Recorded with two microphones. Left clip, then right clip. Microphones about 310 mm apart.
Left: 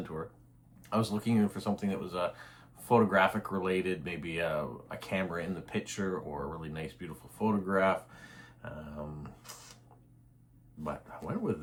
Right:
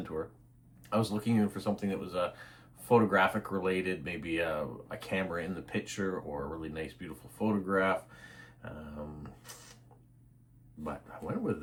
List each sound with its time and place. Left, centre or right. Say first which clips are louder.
0.8 s speech: right 1 dB; centre
10.8 s speech: even; centre